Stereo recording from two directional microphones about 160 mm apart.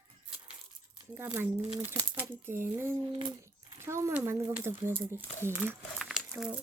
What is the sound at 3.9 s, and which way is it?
Speech, 15° right (ahead or behind).